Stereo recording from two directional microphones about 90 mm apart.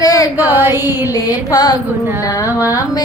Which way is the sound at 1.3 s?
45° left (ahead or behind).